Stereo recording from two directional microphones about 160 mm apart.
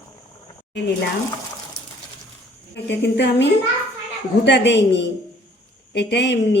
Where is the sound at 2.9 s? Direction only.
90° left.